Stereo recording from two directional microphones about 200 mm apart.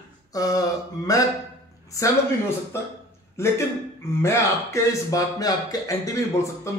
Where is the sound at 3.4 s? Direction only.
15° left (ahead or behind).